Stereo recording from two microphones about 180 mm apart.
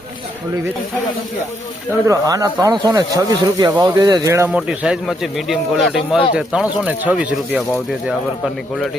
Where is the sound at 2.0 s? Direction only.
20° right (ahead or behind).